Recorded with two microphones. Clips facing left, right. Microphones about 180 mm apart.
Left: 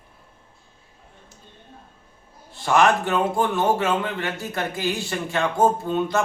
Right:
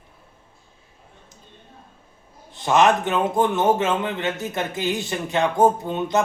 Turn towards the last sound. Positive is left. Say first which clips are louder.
# even
turn(degrees=-20)  # may be behind; listen again after turning